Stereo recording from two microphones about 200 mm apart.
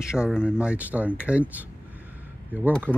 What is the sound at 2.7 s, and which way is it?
Speech, 10° right (ahead or behind).